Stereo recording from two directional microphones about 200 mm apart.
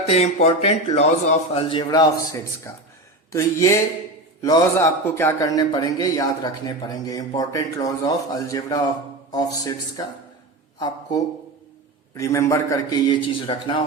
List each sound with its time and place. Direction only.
0.0 s a man's voice: 30° left (ahead or behind)